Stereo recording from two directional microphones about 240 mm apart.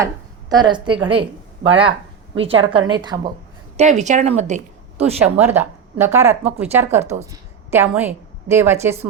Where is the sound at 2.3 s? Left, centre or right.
Right.